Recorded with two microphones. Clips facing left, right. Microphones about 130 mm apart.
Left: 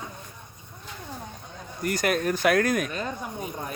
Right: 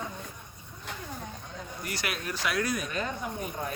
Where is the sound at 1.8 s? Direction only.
45° left (ahead or behind).